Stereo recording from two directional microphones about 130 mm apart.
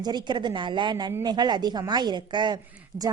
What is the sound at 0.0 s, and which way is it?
A woman's voice, 35° right (ahead or behind).